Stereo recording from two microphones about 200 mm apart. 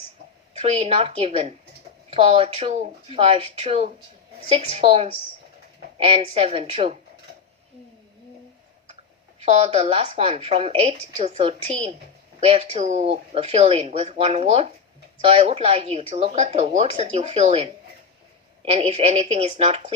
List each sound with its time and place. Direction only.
0.6 s speech: 30° right (ahead or behind)
6.1 s speech: 30° right (ahead or behind)
9.4 s speech: 35° right (ahead or behind)